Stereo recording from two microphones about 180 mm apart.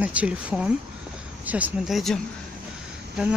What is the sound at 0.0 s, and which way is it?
Speech, 5° right (ahead or behind).